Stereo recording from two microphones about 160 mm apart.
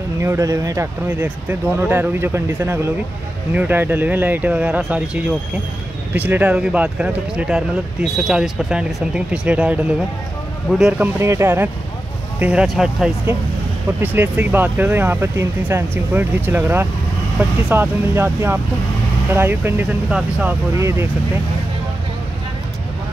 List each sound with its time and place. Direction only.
0.2 s speech: 20° right (ahead or behind)
20.7 s speech: 15° right (ahead or behind)